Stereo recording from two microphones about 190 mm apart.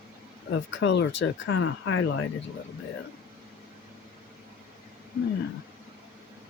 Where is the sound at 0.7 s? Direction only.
75° left (ahead or behind).